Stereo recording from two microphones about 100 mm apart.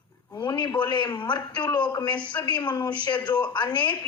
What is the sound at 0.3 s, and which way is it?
A man's voice, 50° left (ahead or behind).